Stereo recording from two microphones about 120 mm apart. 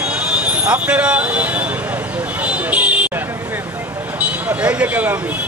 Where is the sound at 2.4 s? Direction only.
10° right (ahead or behind).